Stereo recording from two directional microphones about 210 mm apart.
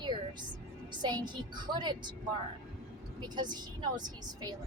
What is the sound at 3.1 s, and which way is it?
A woman's voice, 20° right (ahead or behind).